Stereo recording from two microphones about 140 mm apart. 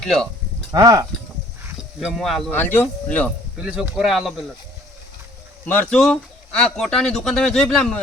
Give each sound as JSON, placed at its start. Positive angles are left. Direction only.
{"t": 0.0, "sound": "speech", "side_deg": 5}
{"t": 0.7, "sound": "speech", "side_deg": -25}
{"t": 2.0, "sound": "speech", "side_deg": 0}
{"t": 2.5, "sound": "speech", "side_deg": 15}
{"t": 3.6, "sound": "speech", "side_deg": -5}
{"t": 5.6, "sound": "speech", "side_deg": 10}